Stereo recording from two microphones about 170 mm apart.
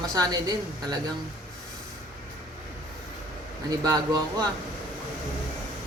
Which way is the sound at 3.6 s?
20° right (ahead or behind).